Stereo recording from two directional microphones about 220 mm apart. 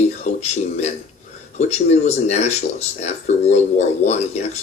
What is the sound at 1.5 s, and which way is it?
Speech, 30° left (ahead or behind).